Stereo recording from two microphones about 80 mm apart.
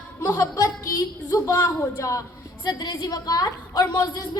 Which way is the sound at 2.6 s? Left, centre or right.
Left.